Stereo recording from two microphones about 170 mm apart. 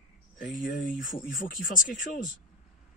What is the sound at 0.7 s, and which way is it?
Speech, 50° left (ahead or behind).